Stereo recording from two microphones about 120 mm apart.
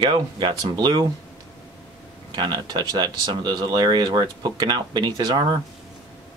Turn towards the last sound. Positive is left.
turn(degrees=-35)  # may be behind; listen again after turning